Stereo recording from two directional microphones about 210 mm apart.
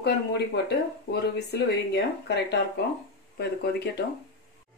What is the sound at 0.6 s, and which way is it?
Speech, 55° left (ahead or behind).